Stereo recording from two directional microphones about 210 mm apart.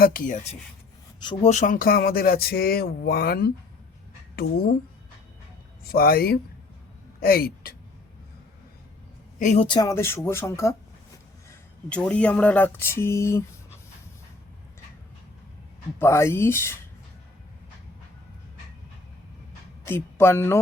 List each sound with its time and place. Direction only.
0.0 s speech: 40° left (ahead or behind)
1.2 s a sound: 25° left (ahead or behind); by 4.7 s 45° left (ahead or behind)
5.9 s a sound: 45° left (ahead or behind)
7.2 s speech: 45° left (ahead or behind)
9.4 s speech: 35° left (ahead or behind)
9.6 s speech: 20° left (ahead or behind)
11.9 s speech: 5° left (ahead or behind)
16.0 s speech: 10° left (ahead or behind)
19.8 s speech: 10° left (ahead or behind)